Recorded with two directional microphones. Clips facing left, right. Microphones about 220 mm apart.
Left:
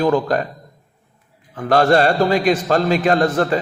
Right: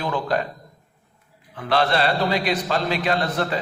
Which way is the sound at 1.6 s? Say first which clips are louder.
Left 7 dB; 45° left (ahead or behind).